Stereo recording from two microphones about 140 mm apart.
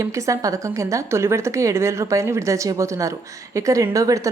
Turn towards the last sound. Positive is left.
turn(degrees=-25)  # may be behind; listen again after turning